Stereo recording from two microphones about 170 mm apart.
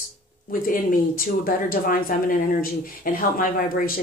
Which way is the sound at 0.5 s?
55° left (ahead or behind).